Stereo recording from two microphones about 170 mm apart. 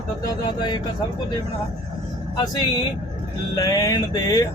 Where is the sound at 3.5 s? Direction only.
20° left (ahead or behind).